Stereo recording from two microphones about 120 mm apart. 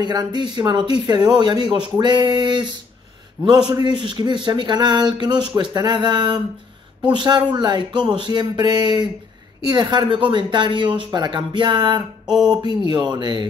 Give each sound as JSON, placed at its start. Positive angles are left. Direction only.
{"t": 0.0, "sound": "speech", "side_deg": -35}